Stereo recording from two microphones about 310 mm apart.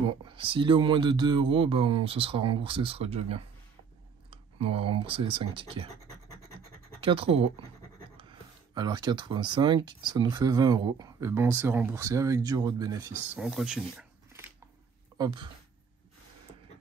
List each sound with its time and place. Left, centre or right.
0.0 s speech: centre
7.1 s speech: centre